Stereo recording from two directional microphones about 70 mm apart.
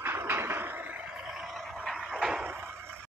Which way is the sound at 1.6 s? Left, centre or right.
Centre.